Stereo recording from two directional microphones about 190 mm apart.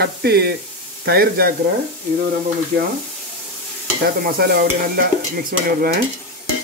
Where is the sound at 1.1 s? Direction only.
55° right (ahead or behind).